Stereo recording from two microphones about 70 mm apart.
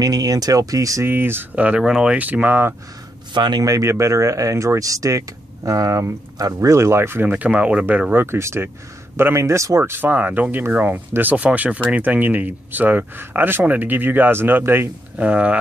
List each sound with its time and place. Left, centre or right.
0.0 s speech: right
1.0 s speech: right
1.5 s speech: centre
1.8 s speech: centre
2.1 s speech: right
3.3 s speech: right
3.6 s speech: right; by 7.8 s centre
8.1 s speech: right
15.1 s speech: centre